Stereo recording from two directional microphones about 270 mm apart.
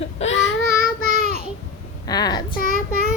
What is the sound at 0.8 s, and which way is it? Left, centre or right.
Child singing, left.